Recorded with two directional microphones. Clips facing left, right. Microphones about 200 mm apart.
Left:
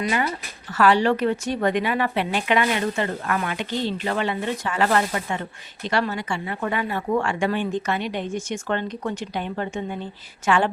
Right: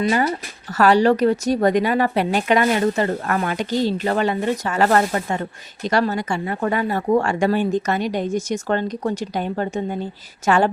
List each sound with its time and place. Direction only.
0.7 s a woman's voice: 40° right (ahead or behind)